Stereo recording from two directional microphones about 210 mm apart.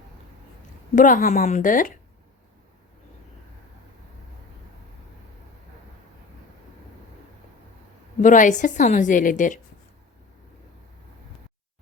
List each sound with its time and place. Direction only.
0.9 s a woman's voice: 40° left (ahead or behind)
8.2 s a woman's voice: 40° left (ahead or behind)